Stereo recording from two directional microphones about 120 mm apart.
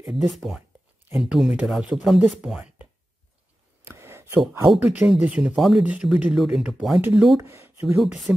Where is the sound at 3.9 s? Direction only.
20° right (ahead or behind).